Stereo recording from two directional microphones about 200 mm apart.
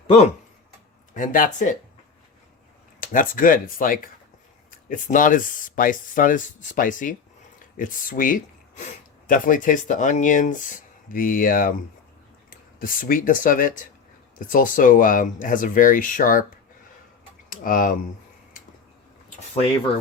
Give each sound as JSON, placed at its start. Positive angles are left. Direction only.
{"t": 1.1, "sound": "speech", "side_deg": 40}
{"t": 3.0, "sound": "speech", "side_deg": 40}
{"t": 17.5, "sound": "speech", "side_deg": 45}